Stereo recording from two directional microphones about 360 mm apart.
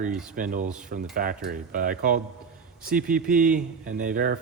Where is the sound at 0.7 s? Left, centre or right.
Centre.